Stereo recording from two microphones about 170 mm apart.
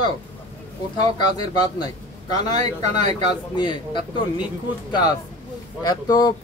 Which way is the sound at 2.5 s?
40° right (ahead or behind).